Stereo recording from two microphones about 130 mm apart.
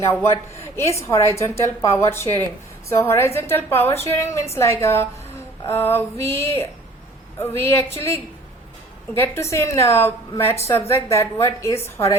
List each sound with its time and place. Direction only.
0.0 s a woman's voice: 20° left (ahead or behind)
9.1 s a woman's voice: 15° left (ahead or behind)